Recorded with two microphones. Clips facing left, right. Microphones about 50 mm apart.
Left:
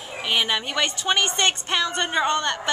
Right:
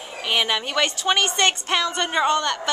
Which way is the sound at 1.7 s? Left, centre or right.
Centre.